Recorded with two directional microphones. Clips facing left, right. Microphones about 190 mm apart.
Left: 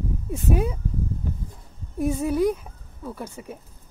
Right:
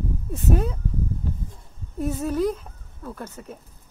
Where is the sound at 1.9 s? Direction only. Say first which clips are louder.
Left 2 dB; 10° left (ahead or behind).